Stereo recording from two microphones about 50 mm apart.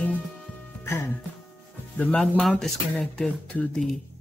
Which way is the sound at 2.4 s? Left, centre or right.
Centre.